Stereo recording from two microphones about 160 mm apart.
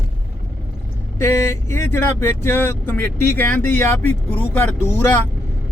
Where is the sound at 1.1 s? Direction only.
15° left (ahead or behind).